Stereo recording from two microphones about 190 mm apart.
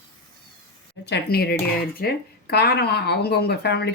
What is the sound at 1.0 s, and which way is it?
Speech, 60° left (ahead or behind).